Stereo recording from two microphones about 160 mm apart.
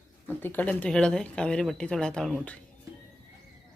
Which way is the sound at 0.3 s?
10° left (ahead or behind).